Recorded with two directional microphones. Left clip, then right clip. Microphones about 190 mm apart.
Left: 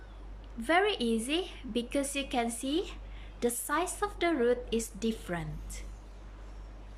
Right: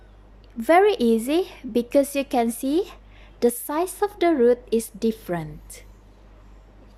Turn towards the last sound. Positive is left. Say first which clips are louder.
# right 8 dB
turn(degrees=-25)  # may be behind; listen again after turning